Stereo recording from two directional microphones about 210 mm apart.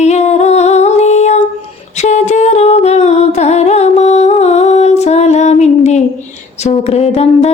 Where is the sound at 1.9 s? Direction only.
35° left (ahead or behind).